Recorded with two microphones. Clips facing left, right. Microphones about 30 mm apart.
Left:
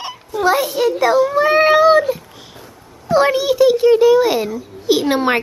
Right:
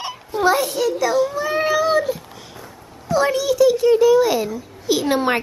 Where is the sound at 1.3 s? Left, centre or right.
Left.